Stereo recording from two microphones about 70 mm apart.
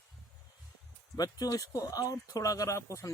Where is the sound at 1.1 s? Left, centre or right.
Left.